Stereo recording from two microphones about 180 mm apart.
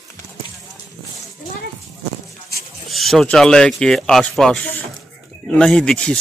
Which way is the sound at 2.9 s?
Centre (ahead or behind).